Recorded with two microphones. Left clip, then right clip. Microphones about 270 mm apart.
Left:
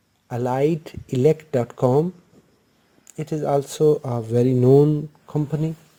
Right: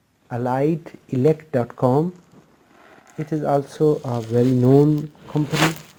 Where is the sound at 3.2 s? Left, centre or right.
Left.